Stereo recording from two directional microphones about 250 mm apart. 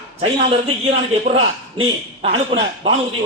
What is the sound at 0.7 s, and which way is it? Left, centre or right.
A man's voice, right.